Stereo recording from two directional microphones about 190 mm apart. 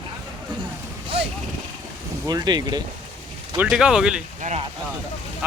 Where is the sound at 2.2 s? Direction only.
20° right (ahead or behind).